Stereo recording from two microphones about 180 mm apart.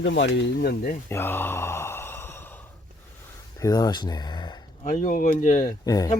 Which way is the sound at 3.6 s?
20° left (ahead or behind).